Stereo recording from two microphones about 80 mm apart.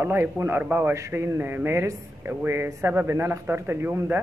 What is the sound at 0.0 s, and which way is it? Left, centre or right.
A man's voice, right.